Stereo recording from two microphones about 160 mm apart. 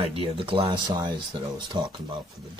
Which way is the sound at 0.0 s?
35° right (ahead or behind).